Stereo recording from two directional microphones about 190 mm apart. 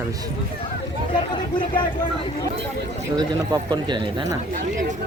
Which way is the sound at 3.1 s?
20° right (ahead or behind).